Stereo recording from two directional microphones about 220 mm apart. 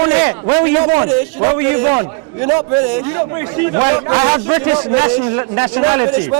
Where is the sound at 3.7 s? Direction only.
20° right (ahead or behind).